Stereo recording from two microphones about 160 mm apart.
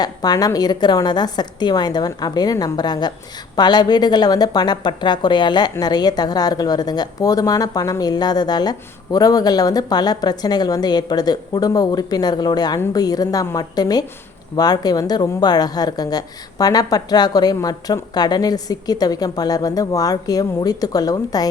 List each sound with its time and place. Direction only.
0.0 s a woman's voice: 25° left (ahead or behind)